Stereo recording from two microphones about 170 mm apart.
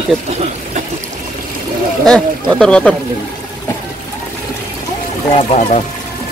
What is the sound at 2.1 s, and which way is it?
Speech, 5° left (ahead or behind).